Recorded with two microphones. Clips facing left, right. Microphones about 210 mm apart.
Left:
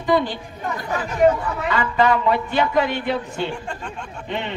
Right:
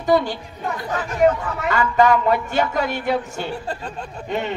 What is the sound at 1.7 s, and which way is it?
Speech, 45° right (ahead or behind).